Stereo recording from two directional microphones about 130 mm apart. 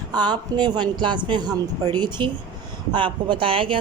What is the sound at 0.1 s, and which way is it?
A woman's voice, 35° right (ahead or behind).